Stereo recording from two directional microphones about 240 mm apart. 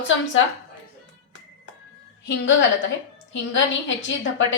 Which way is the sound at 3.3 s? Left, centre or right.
Left.